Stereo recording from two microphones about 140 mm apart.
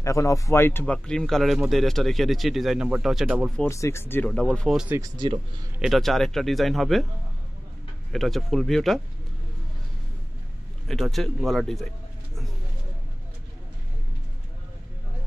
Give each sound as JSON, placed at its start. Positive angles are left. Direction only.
{"t": 0.0, "sound": "speech", "side_deg": 20}
{"t": 0.9, "sound": "speech", "side_deg": 5}
{"t": 3.6, "sound": "speech", "side_deg": 20}
{"t": 4.7, "sound": "speech", "side_deg": -10}
{"t": 5.0, "sound": "speech", "side_deg": -30}
{"t": 5.8, "sound": "speech", "side_deg": 0}
{"t": 8.1, "sound": "speech", "side_deg": 0}
{"t": 10.9, "sound": "speech", "side_deg": 0}